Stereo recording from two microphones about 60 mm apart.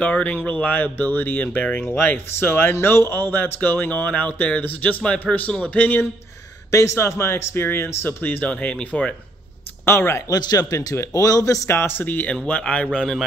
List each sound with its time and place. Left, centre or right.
0.0 s speech: left
1.9 s speech: left
6.7 s speech: left
8.5 s speech: centre
9.8 s speech: left
10.3 s speech: left
11.0 s a man's voice: left
11.7 s speech: left
12.4 s speech: centre
12.8 s a man's voice: centre